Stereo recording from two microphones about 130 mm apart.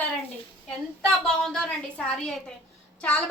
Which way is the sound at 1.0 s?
5° left (ahead or behind).